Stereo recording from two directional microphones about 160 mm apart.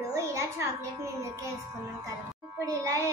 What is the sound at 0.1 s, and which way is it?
A child's voice, 20° right (ahead or behind).